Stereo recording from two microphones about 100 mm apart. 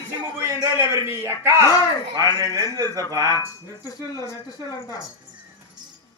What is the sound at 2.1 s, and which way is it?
Speech, 40° right (ahead or behind).